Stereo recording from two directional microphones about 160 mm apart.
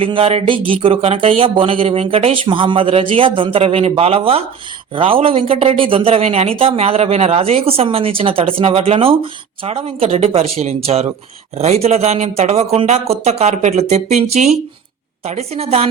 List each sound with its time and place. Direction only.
0.0 s speech: 35° right (ahead or behind)